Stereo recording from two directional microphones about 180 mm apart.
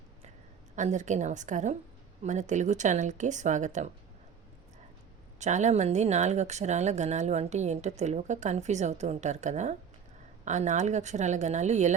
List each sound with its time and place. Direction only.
0.8 s a woman's voice: 40° right (ahead or behind)
5.4 s speech: 40° right (ahead or behind)